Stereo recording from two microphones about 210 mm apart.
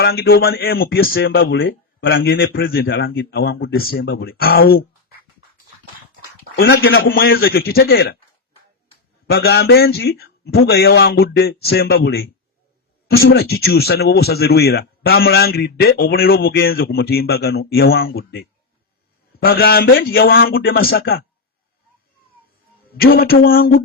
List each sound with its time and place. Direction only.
0.0 s speech: 50° left (ahead or behind)
1.5 s speech: 70° left (ahead or behind)
2.0 s speech: 55° left (ahead or behind)
6.6 s speech: 45° left (ahead or behind)
9.3 s speech: 50° left (ahead or behind)
23.0 s speech: 45° left (ahead or behind)